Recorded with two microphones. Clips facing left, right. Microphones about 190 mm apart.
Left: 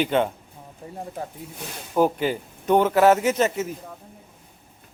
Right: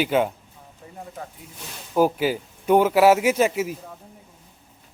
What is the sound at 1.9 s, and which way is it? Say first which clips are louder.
Speech: right 1 dB; 5° right (ahead or behind).